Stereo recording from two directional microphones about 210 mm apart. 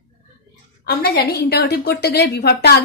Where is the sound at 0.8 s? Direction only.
50° left (ahead or behind).